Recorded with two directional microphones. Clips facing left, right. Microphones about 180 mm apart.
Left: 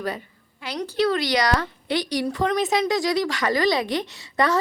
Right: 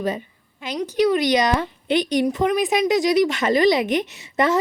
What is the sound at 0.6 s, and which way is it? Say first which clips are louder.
A woman's voice: right 3 dB; 15° right (ahead or behind).